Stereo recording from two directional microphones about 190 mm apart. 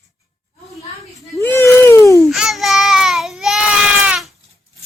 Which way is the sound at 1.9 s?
15° left (ahead or behind).